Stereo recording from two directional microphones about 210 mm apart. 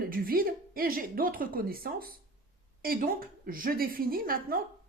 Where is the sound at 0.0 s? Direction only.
45° right (ahead or behind).